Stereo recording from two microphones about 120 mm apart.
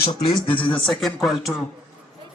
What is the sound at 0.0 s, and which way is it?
Speech, 50° left (ahead or behind).